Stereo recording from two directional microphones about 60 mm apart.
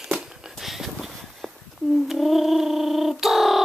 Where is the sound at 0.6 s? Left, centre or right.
Centre.